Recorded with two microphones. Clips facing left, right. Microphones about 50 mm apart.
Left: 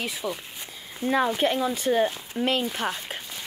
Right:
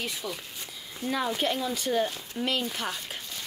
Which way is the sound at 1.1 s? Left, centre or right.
Left.